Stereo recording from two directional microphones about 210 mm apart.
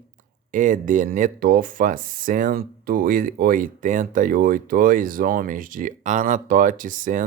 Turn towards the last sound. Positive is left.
turn(degrees=-40)  # may be behind; listen again after turning